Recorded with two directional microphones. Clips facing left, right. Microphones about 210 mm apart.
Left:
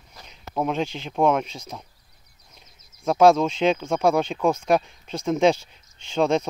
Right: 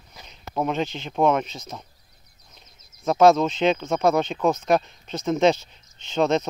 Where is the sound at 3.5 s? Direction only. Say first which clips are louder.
Even; 10° left (ahead or behind).